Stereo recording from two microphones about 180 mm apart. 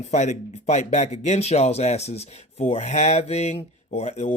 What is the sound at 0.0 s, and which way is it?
Speech, 40° left (ahead or behind).